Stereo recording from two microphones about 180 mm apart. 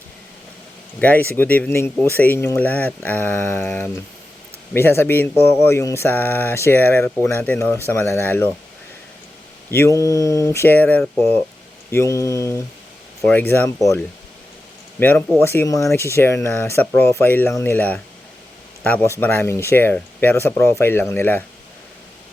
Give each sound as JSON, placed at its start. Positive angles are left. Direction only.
{"t": 1.0, "sound": "speech", "side_deg": 10}
{"t": 9.6, "sound": "speech", "side_deg": 15}
{"t": 14.9, "sound": "speech", "side_deg": 10}